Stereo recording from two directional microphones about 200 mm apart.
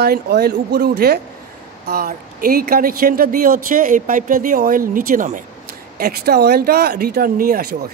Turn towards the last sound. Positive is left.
turn(degrees=-45)  # may be behind; listen again after turning